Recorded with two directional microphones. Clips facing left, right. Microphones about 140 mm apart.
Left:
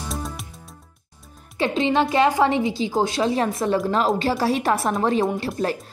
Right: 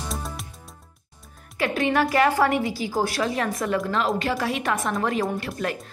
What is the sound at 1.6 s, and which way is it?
Speech, 20° left (ahead or behind).